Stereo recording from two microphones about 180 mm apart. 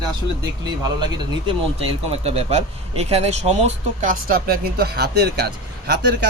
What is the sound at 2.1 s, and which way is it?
Speech, 35° right (ahead or behind).